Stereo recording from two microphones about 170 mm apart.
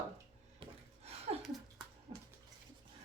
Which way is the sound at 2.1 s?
30° right (ahead or behind).